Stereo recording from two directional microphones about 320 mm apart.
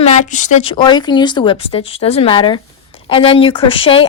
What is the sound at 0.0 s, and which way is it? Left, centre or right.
Speech, left.